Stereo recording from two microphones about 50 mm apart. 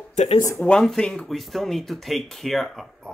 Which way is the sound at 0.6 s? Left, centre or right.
Left.